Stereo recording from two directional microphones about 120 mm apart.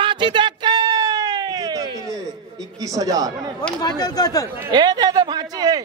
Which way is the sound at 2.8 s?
30° right (ahead or behind).